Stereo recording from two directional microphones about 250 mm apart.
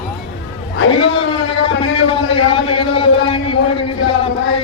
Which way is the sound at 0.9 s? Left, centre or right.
Left.